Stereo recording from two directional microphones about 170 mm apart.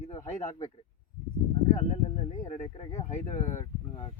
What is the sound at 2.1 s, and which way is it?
Speech, 45° left (ahead or behind).